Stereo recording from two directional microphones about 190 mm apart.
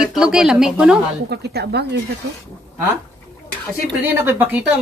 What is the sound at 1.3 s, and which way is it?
Speech, 60° right (ahead or behind).